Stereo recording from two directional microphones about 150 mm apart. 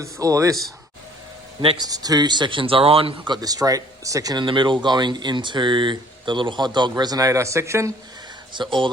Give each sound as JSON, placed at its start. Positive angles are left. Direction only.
{"t": 0.0, "sound": "speech", "side_deg": -20}
{"t": 1.6, "sound": "speech", "side_deg": -30}
{"t": 8.5, "sound": "speech", "side_deg": -35}